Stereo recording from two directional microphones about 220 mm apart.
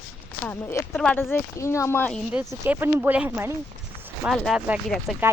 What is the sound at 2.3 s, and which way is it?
Speech, 10° right (ahead or behind).